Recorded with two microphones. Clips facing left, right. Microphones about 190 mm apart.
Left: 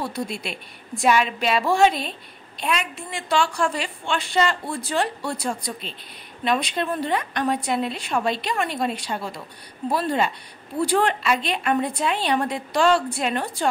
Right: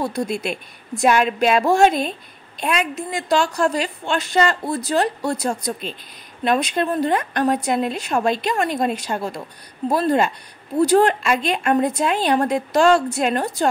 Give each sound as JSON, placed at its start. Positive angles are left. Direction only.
{"t": 0.0, "sound": "a woman's voice", "side_deg": -45}